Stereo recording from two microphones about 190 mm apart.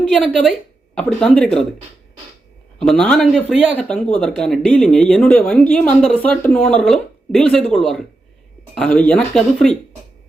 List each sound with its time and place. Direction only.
0.0 s speech: centre (ahead or behind)
2.8 s speech: 5° left (ahead or behind)